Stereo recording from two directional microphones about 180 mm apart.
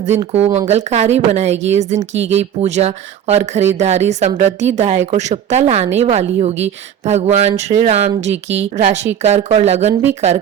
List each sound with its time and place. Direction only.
0.1 s a woman's voice: 35° right (ahead or behind)